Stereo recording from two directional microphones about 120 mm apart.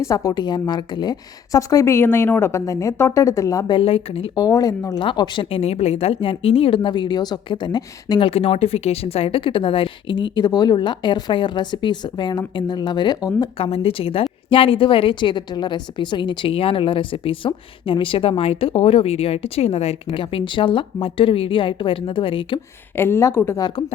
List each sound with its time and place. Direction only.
0.0 s a woman's voice: 25° left (ahead or behind)
3.8 s a woman's voice: 55° left (ahead or behind)
4.4 s speech: 30° left (ahead or behind)
4.9 s a woman's voice: 40° left (ahead or behind)
8.2 s a woman's voice: 55° left (ahead or behind); by 13.5 s 35° left (ahead or behind)
13.6 s a woman's voice: 55° left (ahead or behind)
20.1 s a woman's voice: 45° left (ahead or behind)
23.0 s a woman's voice: 20° left (ahead or behind)
23.6 s speech: 40° left (ahead or behind)